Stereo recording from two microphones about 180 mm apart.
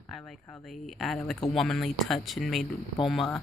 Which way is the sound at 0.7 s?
Centre (ahead or behind).